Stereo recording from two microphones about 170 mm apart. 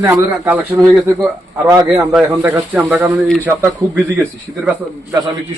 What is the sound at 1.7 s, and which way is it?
Speech, 20° right (ahead or behind).